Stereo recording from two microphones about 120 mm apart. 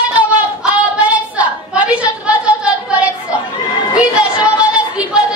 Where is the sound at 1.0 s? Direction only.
10° right (ahead or behind).